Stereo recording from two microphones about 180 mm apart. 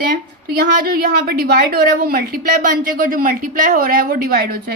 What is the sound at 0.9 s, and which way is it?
A woman's voice, 55° right (ahead or behind).